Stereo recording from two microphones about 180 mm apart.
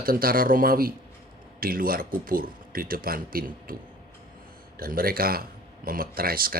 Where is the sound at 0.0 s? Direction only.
55° right (ahead or behind).